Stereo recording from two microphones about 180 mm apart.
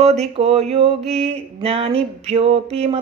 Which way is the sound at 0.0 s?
35° right (ahead or behind).